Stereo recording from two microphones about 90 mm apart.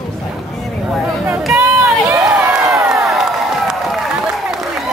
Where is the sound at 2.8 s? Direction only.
5° right (ahead or behind).